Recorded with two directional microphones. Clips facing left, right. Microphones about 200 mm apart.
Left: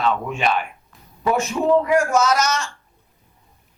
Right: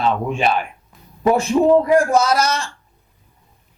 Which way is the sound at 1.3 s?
30° right (ahead or behind).